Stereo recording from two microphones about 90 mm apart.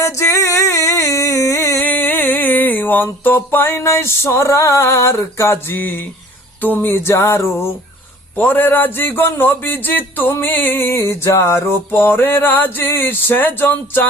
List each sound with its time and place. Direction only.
0.0 s singing: 35° left (ahead or behind)
1.8 s music: 20° left (ahead or behind)
6.6 s a man's voice: 20° left (ahead or behind)